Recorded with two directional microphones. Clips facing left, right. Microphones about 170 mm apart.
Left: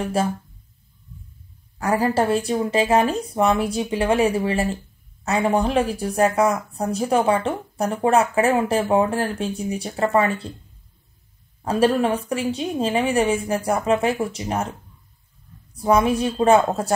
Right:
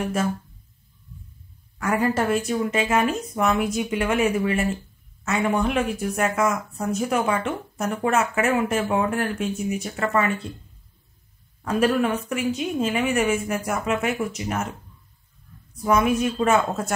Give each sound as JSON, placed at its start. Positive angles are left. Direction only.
{"t": 0.2, "sound": "a woman's voice", "side_deg": 30}
{"t": 1.8, "sound": "a woman's voice", "side_deg": 35}
{"t": 11.6, "sound": "a woman's voice", "side_deg": 35}
{"t": 15.7, "sound": "a woman's voice", "side_deg": 30}